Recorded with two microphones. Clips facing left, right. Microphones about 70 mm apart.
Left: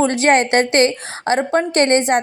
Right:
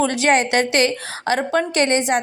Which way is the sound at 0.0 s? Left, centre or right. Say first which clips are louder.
Left 3 dB; left.